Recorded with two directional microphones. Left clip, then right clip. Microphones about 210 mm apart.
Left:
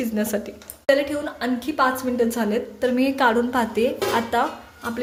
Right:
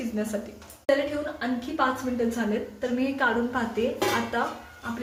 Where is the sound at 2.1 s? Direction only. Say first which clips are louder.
Left 5 dB; 50° left (ahead or behind).